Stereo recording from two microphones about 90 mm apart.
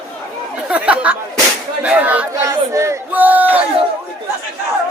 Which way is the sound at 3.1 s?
20° right (ahead or behind).